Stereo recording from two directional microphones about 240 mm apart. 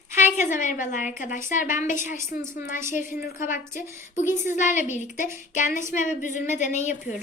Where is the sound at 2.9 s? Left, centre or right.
Left.